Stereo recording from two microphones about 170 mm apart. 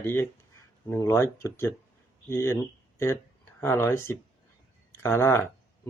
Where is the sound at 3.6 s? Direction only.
15° left (ahead or behind).